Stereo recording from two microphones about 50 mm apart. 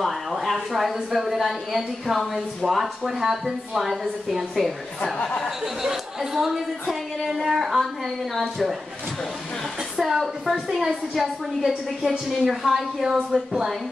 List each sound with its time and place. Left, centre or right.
0.0 s speech: centre
5.0 s speech: centre
5.6 s speech: centre
9.9 s speech: centre